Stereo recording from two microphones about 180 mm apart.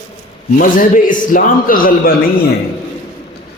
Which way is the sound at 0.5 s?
50° left (ahead or behind).